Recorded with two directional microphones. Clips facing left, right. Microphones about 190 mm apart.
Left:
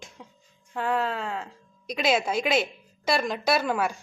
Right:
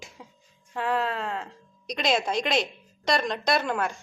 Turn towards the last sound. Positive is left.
turn(degrees=5)  # may be behind; listen again after turning